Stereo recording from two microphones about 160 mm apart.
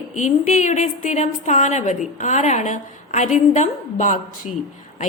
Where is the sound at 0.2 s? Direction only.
50° left (ahead or behind).